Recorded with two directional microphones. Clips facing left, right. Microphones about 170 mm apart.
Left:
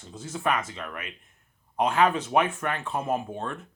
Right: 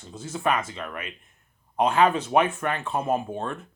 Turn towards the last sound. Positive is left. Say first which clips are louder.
# right 3 dB
turn(degrees=-30)  # may be behind; listen again after turning